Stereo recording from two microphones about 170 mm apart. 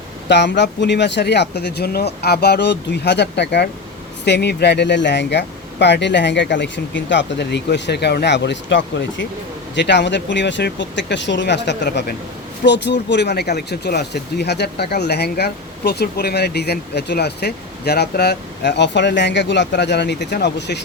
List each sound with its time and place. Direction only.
0.3 s speech: 90° left
4.3 s speech: 75° left (ahead or behind)
12.6 s speech: 90° left